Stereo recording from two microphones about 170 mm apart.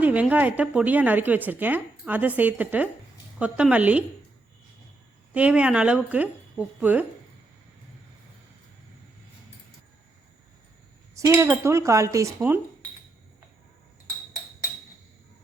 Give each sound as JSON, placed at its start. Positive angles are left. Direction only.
{"t": 0.0, "sound": "speech", "side_deg": -10}
{"t": 5.3, "sound": "speech", "side_deg": -5}
{"t": 11.1, "sound": "speech", "side_deg": -15}